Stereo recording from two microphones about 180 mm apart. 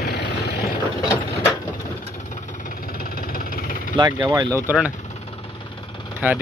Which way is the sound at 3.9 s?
25° right (ahead or behind).